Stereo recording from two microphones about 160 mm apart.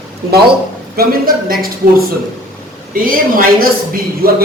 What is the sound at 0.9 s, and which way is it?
Speech, 70° right (ahead or behind).